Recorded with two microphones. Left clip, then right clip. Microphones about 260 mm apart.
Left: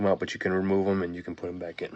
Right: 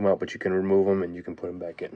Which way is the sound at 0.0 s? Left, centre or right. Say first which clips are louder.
Right 2 dB; centre.